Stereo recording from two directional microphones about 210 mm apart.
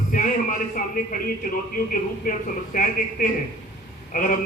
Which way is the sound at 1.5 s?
40° left (ahead or behind).